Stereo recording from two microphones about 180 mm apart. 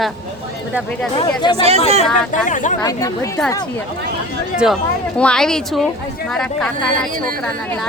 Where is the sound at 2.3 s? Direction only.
45° left (ahead or behind).